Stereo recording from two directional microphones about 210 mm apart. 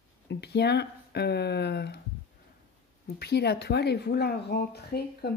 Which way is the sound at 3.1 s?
50° left (ahead or behind).